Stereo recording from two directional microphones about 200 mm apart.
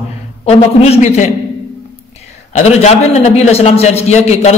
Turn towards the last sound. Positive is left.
turn(degrees=35)  # may be behind; listen again after turning